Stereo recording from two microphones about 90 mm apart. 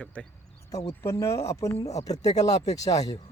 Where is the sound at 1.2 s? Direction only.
35° left (ahead or behind).